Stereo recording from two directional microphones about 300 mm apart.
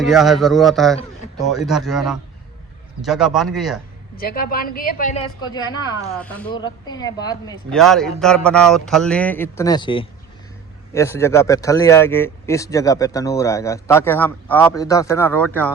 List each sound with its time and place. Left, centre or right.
0.0 s speech: centre
4.2 s a woman's voice: left
6.1 s speech: centre
7.7 s speech: centre